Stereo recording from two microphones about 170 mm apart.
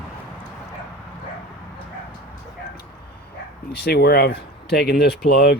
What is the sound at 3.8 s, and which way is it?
Speech, 70° left (ahead or behind).